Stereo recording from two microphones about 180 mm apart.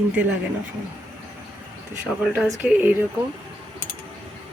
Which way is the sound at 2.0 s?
Centre (ahead or behind).